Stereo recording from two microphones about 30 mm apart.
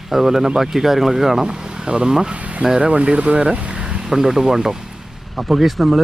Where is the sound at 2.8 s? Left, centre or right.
Right.